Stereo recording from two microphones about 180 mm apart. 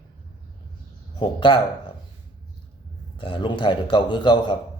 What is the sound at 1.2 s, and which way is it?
Speech, 25° left (ahead or behind).